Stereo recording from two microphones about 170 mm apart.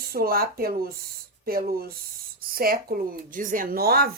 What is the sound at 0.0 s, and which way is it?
Speech, 60° right (ahead or behind).